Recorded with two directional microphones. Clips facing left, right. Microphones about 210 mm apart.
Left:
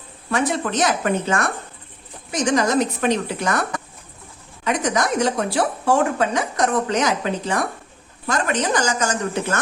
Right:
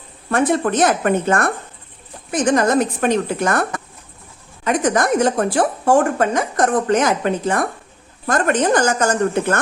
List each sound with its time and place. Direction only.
0.3 s a woman's voice: 50° right (ahead or behind)